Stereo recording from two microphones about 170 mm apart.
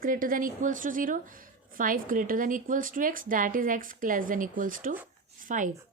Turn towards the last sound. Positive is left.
turn(degrees=-50)  # may be behind; listen again after turning